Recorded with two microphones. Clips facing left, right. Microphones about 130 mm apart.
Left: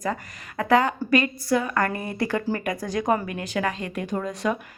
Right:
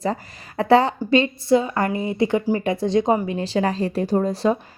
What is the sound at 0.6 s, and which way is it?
A woman's voice, 30° right (ahead or behind).